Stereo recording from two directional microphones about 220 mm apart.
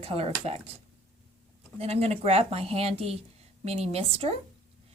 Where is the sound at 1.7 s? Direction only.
30° right (ahead or behind).